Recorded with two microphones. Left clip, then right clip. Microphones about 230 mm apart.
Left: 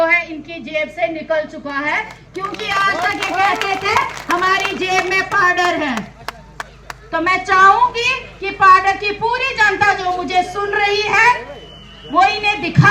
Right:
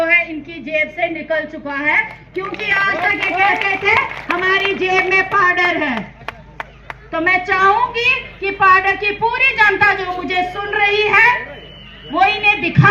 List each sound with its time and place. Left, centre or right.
0.0 s a woman's voice: left
6.2 s chop: centre
7.1 s a woman's voice: left